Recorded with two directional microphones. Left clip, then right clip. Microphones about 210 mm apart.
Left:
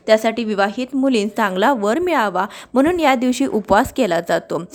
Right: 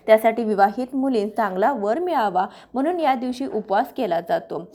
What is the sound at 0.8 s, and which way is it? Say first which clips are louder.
A woman's voice: left 4 dB; 40° left (ahead or behind).